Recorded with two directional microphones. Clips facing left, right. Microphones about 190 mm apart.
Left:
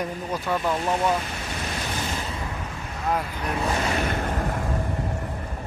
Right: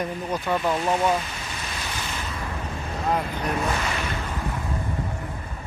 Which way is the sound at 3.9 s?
50° left (ahead or behind).